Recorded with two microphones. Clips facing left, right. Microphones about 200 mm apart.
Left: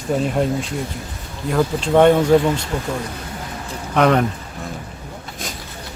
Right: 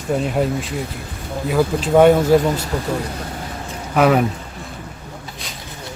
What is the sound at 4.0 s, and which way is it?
Speech, 5° right (ahead or behind).